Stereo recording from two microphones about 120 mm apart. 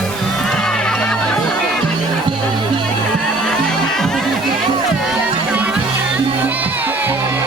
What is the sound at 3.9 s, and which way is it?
Music, 5° left (ahead or behind).